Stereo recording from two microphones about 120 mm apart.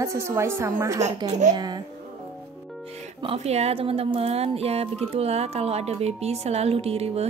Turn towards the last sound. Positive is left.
turn(degrees=-55)  # may be behind; listen again after turning